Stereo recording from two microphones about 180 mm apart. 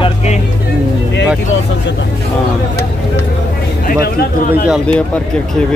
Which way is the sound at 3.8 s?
60° left (ahead or behind).